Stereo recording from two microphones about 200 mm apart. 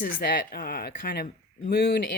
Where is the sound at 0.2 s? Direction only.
50° left (ahead or behind).